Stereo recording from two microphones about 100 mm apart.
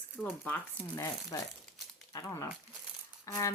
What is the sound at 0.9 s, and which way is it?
A woman's voice, 35° left (ahead or behind).